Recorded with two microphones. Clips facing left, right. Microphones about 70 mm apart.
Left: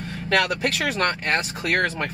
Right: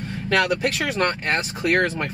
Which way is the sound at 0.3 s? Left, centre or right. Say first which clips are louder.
Right 1 dB; centre.